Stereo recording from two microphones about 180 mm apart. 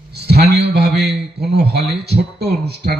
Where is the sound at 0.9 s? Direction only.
65° right (ahead or behind).